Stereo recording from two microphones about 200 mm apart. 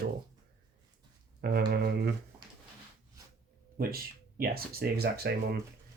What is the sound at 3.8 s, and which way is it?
Speech, 50° right (ahead or behind).